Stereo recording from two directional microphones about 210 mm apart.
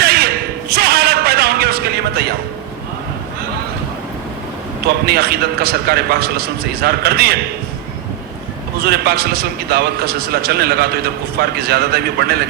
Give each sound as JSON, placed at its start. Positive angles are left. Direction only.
{"t": 0.0, "sound": "a sound", "side_deg": -50}
{"t": 5.0, "sound": "a man's voice", "side_deg": -50}
{"t": 8.8, "sound": "a man's voice", "side_deg": -50}